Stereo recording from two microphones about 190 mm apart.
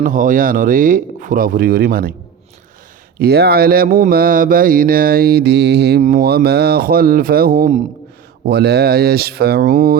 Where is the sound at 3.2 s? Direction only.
55° right (ahead or behind).